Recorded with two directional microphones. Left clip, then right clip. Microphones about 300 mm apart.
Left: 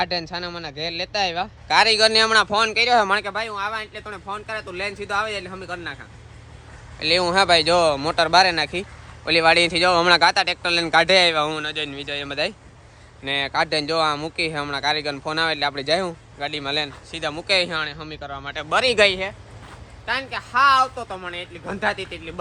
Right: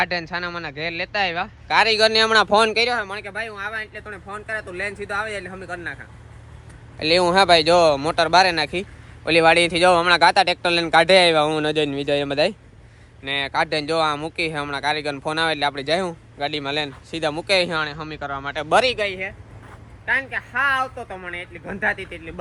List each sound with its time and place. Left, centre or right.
0.0 s speech: centre
3.0 s speech: left
3.2 s speech: centre
7.0 s speech: centre
18.9 s speech: left
20.1 s speech: centre